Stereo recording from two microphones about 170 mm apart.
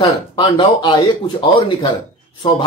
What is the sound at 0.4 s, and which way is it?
Speech, 25° left (ahead or behind).